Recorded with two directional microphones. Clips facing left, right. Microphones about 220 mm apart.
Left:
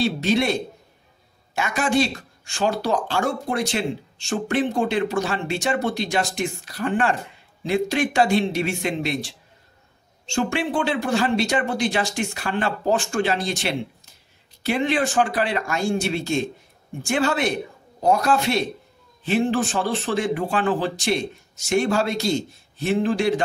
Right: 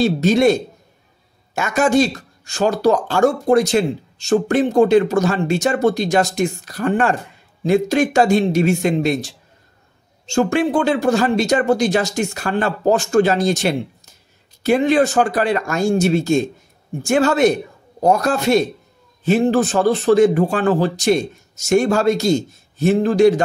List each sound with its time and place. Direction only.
0.0 s speech: 45° right (ahead or behind)